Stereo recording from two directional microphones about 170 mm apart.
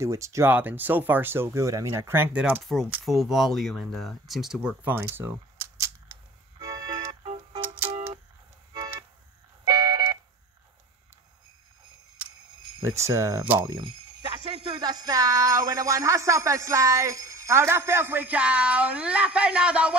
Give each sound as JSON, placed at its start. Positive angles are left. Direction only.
{"t": 0.0, "sound": "jingle bell", "side_deg": -15}
{"t": 2.6, "sound": "speech", "side_deg": 0}
{"t": 6.6, "sound": "music", "side_deg": -20}
{"t": 7.6, "sound": "a sound", "side_deg": -10}
{"t": 9.7, "sound": "smoke detector", "side_deg": -25}
{"t": 12.2, "sound": "camera", "side_deg": -10}
{"t": 12.8, "sound": "jingle bell", "side_deg": -15}